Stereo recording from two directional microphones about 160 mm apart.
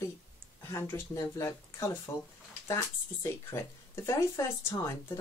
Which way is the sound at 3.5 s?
15° left (ahead or behind).